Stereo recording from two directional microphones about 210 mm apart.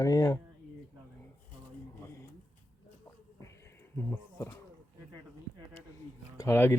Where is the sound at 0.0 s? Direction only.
15° left (ahead or behind).